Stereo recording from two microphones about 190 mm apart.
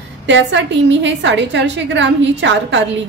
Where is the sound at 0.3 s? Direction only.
70° right (ahead or behind).